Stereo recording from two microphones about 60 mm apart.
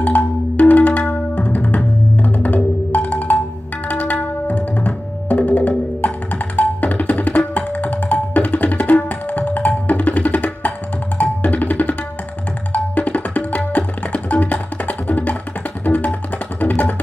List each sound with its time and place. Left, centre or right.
0.0 s music: left